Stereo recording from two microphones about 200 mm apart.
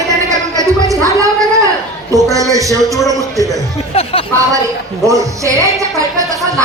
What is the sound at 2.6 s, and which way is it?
Speech, 15° right (ahead or behind).